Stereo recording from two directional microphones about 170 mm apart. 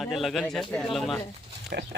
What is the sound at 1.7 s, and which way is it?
Speech, 70° right (ahead or behind).